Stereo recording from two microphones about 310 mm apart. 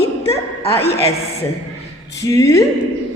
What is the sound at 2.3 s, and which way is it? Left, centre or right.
Speech, centre.